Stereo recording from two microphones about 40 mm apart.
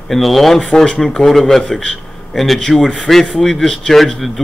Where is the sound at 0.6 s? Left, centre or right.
Left.